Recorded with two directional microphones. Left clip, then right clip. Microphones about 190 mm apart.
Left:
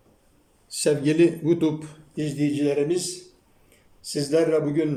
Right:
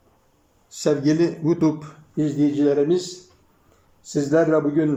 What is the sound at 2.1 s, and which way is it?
Speech, 10° left (ahead or behind).